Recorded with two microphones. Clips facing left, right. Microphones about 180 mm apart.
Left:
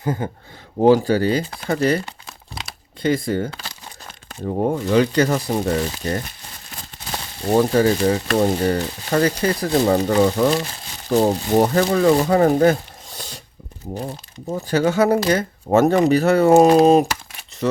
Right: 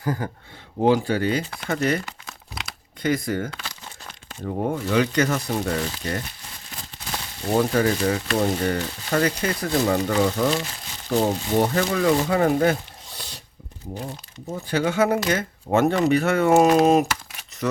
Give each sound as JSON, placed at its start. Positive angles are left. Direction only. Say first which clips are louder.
{"t": 0.0, "sound": "speech", "louder": "left 3 dB", "side_deg": 25}
{"t": 0.8, "sound": "speech", "louder": "left 5 dB", "side_deg": 40}
{"t": 7.5, "sound": "speech", "louder": "left 4 dB", "side_deg": 30}